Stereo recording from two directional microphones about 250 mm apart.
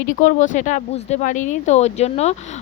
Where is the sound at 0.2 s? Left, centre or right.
Left.